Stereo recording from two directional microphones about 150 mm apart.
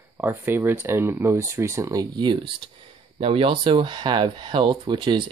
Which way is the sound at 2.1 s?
30° right (ahead or behind).